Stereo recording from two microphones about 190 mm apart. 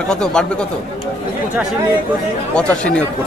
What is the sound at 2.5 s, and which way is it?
Speech, 5° left (ahead or behind).